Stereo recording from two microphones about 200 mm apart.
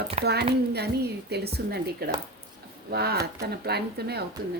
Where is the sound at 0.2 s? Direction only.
30° right (ahead or behind).